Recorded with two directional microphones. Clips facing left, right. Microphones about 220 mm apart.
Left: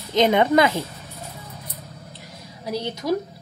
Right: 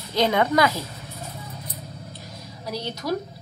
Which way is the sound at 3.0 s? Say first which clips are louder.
Left 3 dB; 20° left (ahead or behind).